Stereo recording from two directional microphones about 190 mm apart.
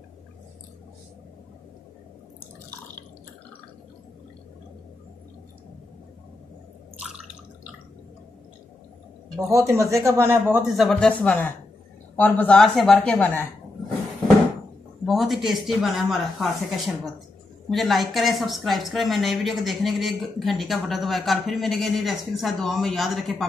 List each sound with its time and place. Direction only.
9.5 s speech: 15° right (ahead or behind)
10.7 s speech: centre (ahead or behind)
15.0 s speech: centre (ahead or behind)